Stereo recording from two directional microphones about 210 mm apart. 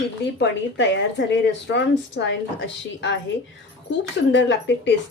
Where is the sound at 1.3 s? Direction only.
60° left (ahead or behind).